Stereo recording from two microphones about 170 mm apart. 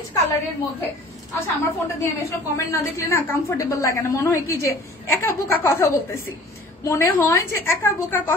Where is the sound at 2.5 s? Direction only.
15° left (ahead or behind).